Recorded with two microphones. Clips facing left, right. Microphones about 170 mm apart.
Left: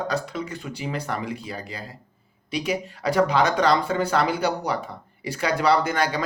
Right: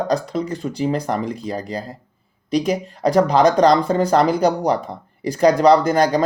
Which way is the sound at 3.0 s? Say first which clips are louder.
Right 6 dB; 35° right (ahead or behind).